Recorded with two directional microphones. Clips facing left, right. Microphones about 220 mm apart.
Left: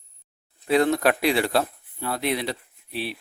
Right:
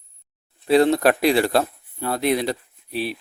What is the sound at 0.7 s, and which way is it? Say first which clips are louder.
Speech: right 4 dB; 30° right (ahead or behind).